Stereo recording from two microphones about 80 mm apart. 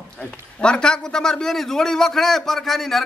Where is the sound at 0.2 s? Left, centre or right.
Centre.